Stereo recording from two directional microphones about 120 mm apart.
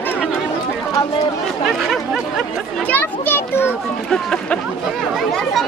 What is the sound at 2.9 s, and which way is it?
Speech, 15° left (ahead or behind).